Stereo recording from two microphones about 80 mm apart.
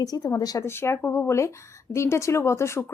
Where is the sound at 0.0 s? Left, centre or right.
Left.